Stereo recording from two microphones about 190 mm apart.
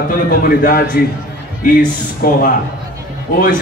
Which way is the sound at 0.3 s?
50° left (ahead or behind).